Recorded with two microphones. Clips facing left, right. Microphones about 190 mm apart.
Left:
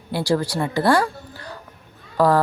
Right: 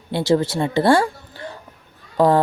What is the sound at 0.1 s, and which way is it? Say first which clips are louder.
A woman's voice: right 3 dB; 25° right (ahead or behind).